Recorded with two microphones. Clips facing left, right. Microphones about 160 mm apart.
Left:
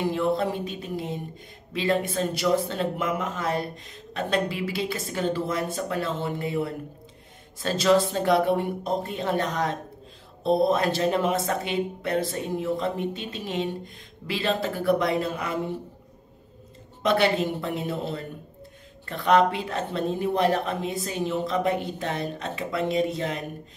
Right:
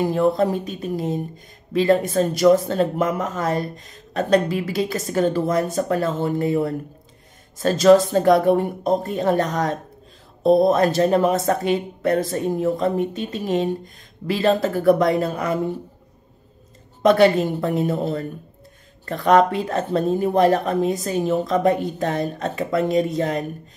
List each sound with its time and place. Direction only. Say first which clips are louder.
0.0 s speech: right 6 dB; 45° right (ahead or behind)
17.0 s speech: right 7 dB; 45° right (ahead or behind)